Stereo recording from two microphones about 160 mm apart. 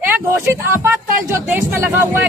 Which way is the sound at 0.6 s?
15° right (ahead or behind).